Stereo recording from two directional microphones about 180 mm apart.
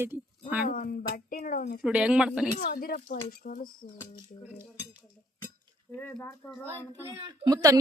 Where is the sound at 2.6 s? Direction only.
55° left (ahead or behind).